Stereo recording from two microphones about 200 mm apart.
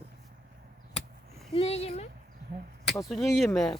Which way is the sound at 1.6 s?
30° left (ahead or behind).